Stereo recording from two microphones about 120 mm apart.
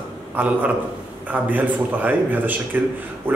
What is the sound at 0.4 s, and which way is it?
Speech, 15° right (ahead or behind).